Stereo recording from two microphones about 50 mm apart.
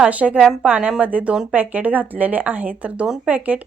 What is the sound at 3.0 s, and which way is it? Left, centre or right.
Speech, centre.